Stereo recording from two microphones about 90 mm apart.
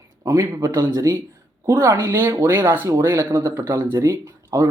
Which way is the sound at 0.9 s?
40° right (ahead or behind).